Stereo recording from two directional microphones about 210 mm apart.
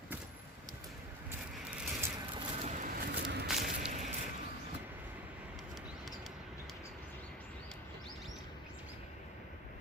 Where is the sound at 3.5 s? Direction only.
Centre (ahead or behind).